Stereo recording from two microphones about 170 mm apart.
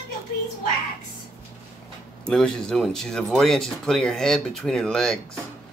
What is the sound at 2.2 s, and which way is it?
Speech, 5° left (ahead or behind).